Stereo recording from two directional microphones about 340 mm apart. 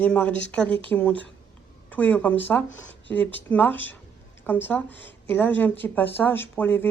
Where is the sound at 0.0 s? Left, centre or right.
Centre.